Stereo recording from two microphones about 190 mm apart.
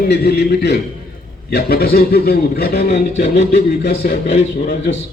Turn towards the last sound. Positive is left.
turn(degrees=40)  # may be behind; listen again after turning